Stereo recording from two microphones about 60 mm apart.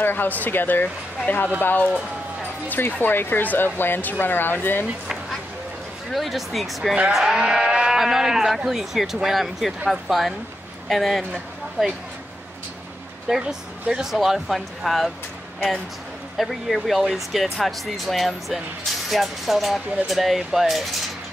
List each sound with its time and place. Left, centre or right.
0.0 s speech: left
6.1 s speech: centre
13.3 s speech: centre
16.3 s speech: centre